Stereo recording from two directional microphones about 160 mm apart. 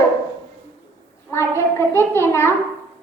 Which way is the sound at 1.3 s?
15° left (ahead or behind).